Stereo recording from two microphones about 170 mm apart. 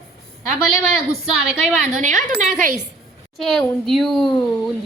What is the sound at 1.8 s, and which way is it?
Speech, 45° right (ahead or behind).